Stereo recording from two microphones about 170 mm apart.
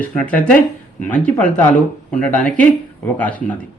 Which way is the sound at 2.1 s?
5° left (ahead or behind).